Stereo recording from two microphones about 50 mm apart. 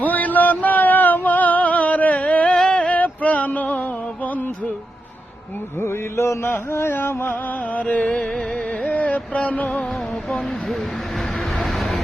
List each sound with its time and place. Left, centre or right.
0.0 s a sound: left
2.6 s a sound: centre
2.8 s music: left
5.8 s music: left
7.7 s music: left
10.2 s vehicle: centre